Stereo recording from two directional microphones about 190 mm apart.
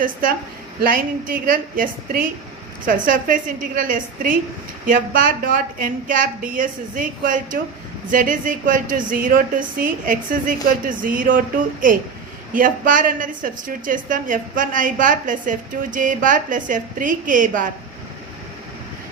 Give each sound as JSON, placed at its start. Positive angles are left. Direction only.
{"t": 0.0, "sound": "a woman's voice", "side_deg": -45}